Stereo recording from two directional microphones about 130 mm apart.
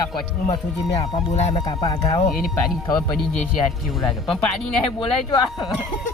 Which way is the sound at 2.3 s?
90° left.